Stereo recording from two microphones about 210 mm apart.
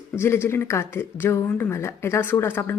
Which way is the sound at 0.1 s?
10° left (ahead or behind).